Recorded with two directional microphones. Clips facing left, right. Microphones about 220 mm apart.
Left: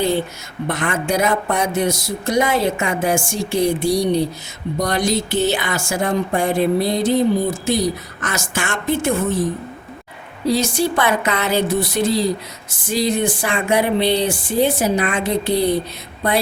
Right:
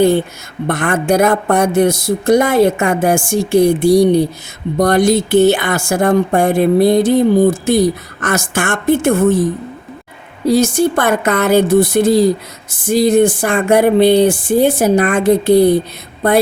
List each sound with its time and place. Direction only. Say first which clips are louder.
0.7 s a woman's voice: right 7 dB; 55° right (ahead or behind)
10.4 s speech: right 6 dB; 50° right (ahead or behind)